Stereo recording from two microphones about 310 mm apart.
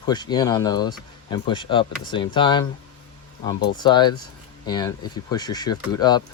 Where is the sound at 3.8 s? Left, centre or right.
Centre.